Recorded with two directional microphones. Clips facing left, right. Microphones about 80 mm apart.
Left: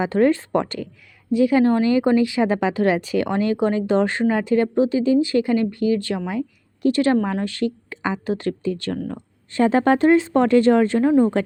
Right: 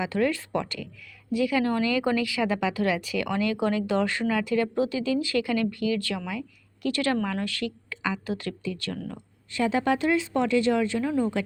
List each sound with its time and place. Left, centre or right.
0.0 s speech: left